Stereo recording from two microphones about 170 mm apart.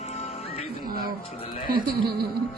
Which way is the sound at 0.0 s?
40° left (ahead or behind).